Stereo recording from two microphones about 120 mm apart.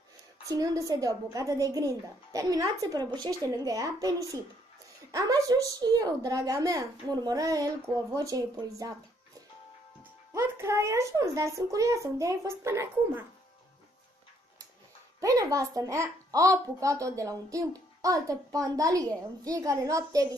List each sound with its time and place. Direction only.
0.5 s a child's voice: 30° right (ahead or behind)
10.3 s a child's voice: 25° right (ahead or behind)
15.1 s a child's voice: 30° right (ahead or behind)